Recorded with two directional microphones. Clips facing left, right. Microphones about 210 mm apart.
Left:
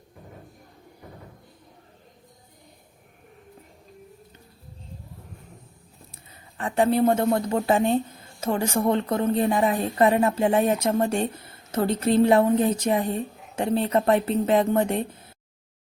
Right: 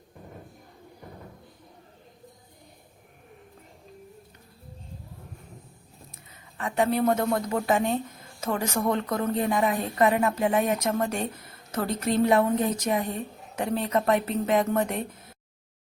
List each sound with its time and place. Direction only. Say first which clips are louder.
6.6 s a woman's voice: left 4 dB; 30° left (ahead or behind)